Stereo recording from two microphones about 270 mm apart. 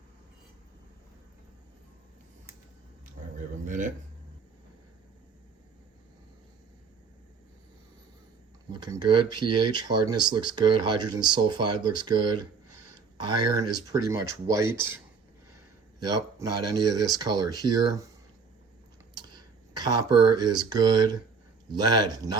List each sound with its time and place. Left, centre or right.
3.7 s a sound: right
8.7 s speech: centre
19.1 s speech: centre